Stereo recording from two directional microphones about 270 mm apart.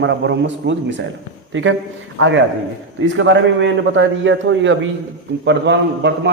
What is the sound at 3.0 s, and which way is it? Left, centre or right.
A man's voice, right.